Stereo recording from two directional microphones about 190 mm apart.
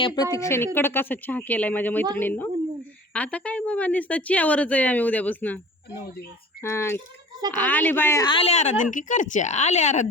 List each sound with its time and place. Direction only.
0.0 s a woman's voice: 20° left (ahead or behind)
6.6 s a woman's voice: 15° left (ahead or behind); by 10.1 s 40° left (ahead or behind)